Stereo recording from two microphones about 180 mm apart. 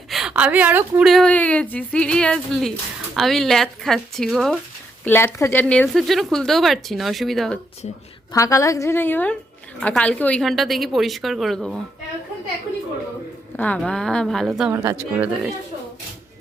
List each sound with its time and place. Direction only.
0.1 s a woman's voice: 5° right (ahead or behind)
5.0 s a woman's voice: 15° left (ahead or behind)
8.3 s a woman's voice: 15° left (ahead or behind); by 11.8 s centre (ahead or behind)
13.6 s a woman's voice: 5° left (ahead or behind)
14.7 s speech: 15° right (ahead or behind)